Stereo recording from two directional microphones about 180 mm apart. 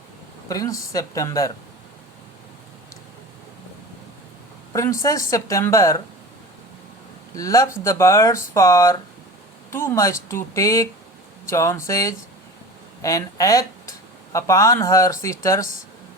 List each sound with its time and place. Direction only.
0.4 s speech: 20° left (ahead or behind)
4.7 s speech: 15° left (ahead or behind)
7.3 s speech: 20° left (ahead or behind)